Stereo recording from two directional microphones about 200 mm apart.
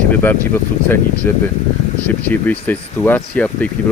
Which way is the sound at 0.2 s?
10° left (ahead or behind).